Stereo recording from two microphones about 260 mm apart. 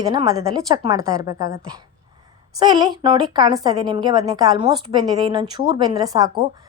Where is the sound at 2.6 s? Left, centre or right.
Centre.